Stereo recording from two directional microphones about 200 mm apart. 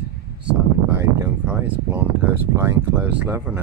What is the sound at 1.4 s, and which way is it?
Speech, 5° right (ahead or behind).